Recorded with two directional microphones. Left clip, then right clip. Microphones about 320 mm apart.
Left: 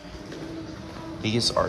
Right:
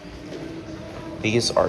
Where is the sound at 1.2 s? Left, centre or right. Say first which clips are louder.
Right 4 dB; left.